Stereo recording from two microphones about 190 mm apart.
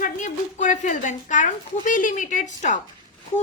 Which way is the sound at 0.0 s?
40° left (ahead or behind).